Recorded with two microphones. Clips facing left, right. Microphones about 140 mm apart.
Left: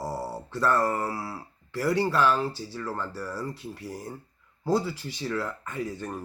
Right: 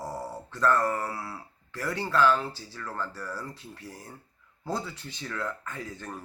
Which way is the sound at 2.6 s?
25° left (ahead or behind).